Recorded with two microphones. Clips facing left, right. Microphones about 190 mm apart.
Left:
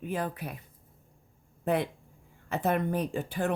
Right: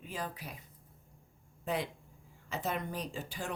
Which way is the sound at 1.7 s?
60° left (ahead or behind).